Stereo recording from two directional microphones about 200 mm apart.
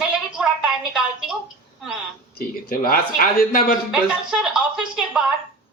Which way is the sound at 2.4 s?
45° left (ahead or behind).